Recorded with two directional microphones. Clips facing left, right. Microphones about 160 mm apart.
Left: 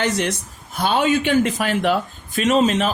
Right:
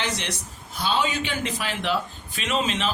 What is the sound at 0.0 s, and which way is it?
Speech, 50° left (ahead or behind).